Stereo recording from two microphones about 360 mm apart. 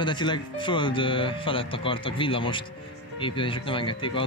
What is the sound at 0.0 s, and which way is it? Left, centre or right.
Speech, centre.